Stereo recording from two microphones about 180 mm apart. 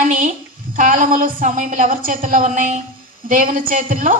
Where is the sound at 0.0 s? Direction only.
45° right (ahead or behind).